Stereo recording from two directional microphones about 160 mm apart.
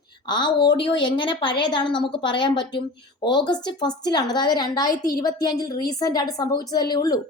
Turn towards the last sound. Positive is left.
turn(degrees=25)  # may be behind; listen again after turning